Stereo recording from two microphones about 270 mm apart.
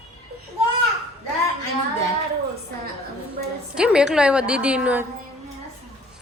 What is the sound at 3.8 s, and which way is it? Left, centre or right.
A woman's voice, centre.